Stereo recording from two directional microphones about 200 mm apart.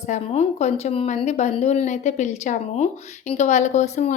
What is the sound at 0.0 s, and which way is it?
A woman's voice, 35° left (ahead or behind).